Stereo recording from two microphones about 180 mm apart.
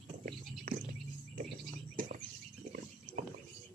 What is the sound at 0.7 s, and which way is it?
Music, 55° right (ahead or behind).